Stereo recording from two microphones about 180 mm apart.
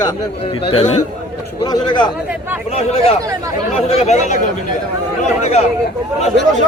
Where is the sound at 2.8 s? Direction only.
35° left (ahead or behind).